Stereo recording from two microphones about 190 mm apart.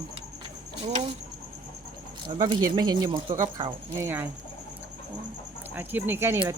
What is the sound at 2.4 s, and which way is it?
Speech, 20° right (ahead or behind).